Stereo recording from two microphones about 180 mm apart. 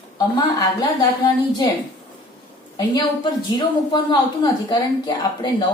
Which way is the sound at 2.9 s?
25° left (ahead or behind).